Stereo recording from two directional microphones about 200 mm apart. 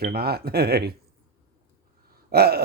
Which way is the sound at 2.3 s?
50° right (ahead or behind).